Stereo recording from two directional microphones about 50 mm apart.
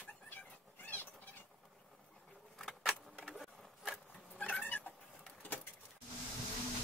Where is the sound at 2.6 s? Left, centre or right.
Centre.